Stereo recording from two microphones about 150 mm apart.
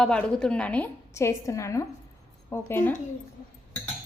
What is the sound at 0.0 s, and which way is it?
A woman's voice, 5° left (ahead or behind).